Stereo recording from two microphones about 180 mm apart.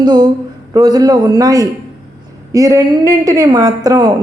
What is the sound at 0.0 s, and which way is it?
Speech, 25° right (ahead or behind).